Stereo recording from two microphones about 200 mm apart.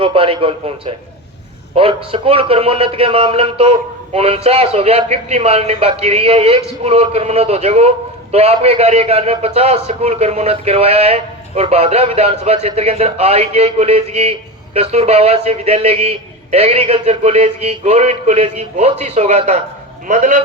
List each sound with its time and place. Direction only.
0.0 s a man's voice: 25° right (ahead or behind)